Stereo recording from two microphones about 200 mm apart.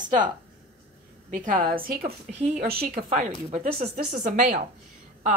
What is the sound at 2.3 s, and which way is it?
Speech, 30° right (ahead or behind).